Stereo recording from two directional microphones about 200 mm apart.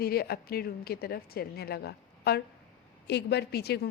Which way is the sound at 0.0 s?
50° left (ahead or behind).